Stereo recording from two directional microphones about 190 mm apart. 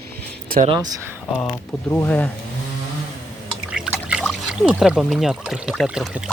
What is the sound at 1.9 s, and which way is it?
Speech, 10° left (ahead or behind).